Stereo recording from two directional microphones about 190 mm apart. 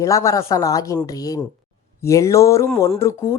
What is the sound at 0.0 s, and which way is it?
Speech, 15° left (ahead or behind).